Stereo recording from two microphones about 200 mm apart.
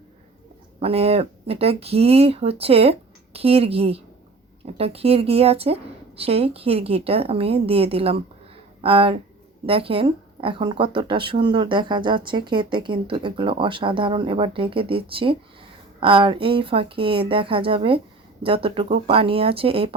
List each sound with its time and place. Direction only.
0.8 s speech: 30° right (ahead or behind)